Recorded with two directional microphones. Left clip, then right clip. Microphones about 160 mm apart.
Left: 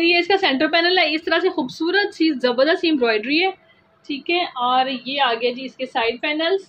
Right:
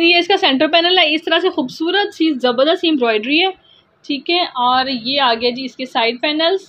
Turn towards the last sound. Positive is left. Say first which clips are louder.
# right 5 dB
turn(degrees=-55)  # may be behind; listen again after turning